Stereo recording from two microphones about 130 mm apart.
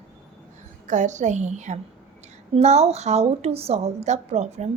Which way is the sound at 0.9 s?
70° right (ahead or behind).